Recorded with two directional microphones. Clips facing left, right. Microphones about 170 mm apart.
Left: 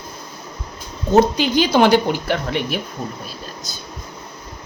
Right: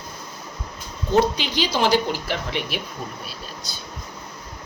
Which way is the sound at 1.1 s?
45° left (ahead or behind).